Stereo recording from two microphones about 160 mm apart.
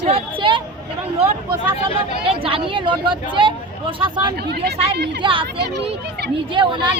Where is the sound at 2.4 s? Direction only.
30° right (ahead or behind).